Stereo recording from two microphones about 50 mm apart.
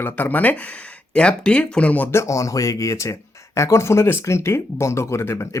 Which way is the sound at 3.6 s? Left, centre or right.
Left.